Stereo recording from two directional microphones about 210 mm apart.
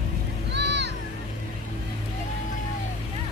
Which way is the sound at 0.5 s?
55° right (ahead or behind).